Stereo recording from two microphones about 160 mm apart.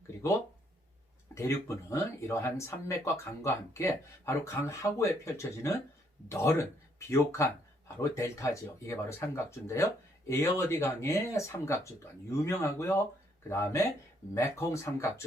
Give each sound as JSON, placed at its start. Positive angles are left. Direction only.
{"t": 1.4, "sound": "speech", "side_deg": 15}